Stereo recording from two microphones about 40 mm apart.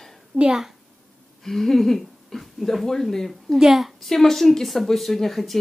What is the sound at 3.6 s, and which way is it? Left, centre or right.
Speech, centre.